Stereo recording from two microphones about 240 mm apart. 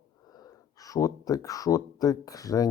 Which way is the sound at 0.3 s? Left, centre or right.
Centre.